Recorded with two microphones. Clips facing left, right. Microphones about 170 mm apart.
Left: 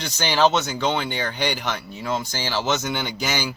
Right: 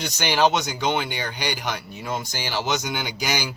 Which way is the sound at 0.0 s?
15° right (ahead or behind).